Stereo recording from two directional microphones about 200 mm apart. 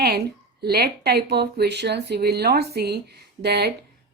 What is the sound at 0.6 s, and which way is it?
A woman's voice, 55° right (ahead or behind).